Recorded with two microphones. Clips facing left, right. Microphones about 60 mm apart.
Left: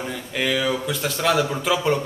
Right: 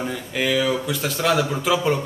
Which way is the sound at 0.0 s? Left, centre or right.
Centre.